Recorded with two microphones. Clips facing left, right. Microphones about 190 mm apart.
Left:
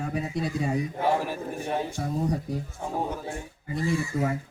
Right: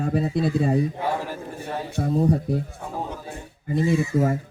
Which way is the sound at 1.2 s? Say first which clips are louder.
Left 1 dB; 15° left (ahead or behind).